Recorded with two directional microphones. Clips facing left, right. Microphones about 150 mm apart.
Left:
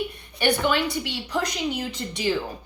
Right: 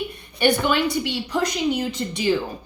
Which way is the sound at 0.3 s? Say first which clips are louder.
Right 3 dB; 15° right (ahead or behind).